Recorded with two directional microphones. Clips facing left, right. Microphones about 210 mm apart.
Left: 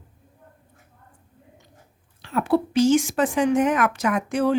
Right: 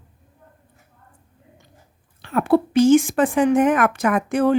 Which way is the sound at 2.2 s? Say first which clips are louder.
Right 4 dB; 55° right (ahead or behind).